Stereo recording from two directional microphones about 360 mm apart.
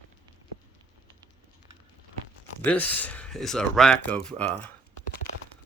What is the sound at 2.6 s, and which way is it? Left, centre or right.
Speech, centre.